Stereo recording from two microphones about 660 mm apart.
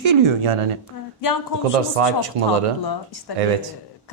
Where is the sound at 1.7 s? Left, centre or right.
Right.